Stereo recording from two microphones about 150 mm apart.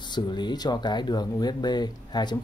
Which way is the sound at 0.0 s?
30° left (ahead or behind).